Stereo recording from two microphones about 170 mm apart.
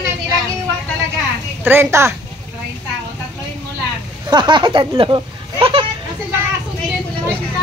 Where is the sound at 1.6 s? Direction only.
15° right (ahead or behind).